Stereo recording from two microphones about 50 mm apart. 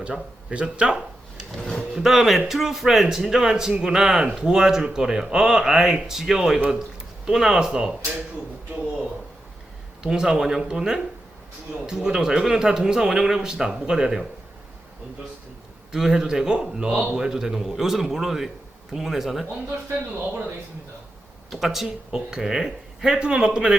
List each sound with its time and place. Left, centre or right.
0.1 s speech: centre
1.9 s speech: centre
10.0 s speech: centre
15.9 s speech: centre
21.5 s speech: centre